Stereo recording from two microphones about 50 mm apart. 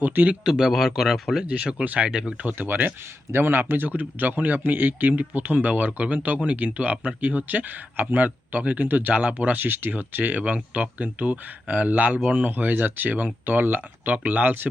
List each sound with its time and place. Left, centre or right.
0.0 s speech: right
0.4 s speech: centre
1.5 s speech: right
2.0 s speech: centre
2.6 s speech: right